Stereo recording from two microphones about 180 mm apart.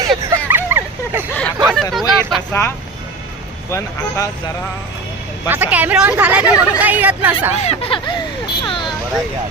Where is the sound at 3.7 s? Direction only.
15° left (ahead or behind).